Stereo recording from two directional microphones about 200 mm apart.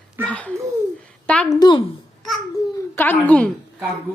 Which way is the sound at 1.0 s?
5° left (ahead or behind).